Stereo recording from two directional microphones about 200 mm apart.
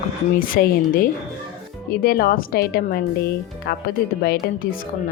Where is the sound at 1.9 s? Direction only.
50° left (ahead or behind).